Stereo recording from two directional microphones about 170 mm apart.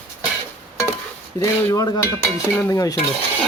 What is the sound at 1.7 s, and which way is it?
Speech, 20° left (ahead or behind).